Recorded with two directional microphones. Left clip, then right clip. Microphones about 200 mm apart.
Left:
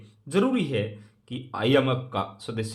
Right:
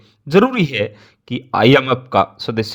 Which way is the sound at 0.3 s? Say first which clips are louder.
Right 11 dB; 45° right (ahead or behind).